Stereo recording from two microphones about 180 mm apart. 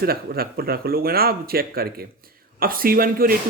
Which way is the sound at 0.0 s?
55° right (ahead or behind).